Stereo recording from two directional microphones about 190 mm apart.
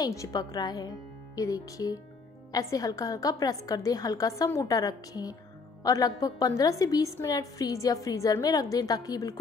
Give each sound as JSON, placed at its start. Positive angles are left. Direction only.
{"t": 0.0, "sound": "a woman's voice", "side_deg": 20}